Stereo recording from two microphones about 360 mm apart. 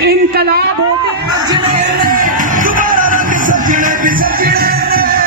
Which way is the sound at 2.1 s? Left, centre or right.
Right.